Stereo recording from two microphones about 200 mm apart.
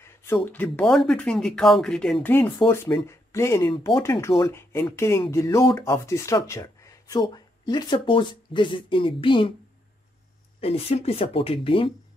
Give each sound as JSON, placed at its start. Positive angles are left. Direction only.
{"t": 0.0, "sound": "a sound", "side_deg": 15}
{"t": 0.5, "sound": "speech", "side_deg": 10}
{"t": 2.6, "sound": "speech", "side_deg": 20}
{"t": 3.7, "sound": "speech", "side_deg": 25}
{"t": 10.6, "sound": "speech", "side_deg": 30}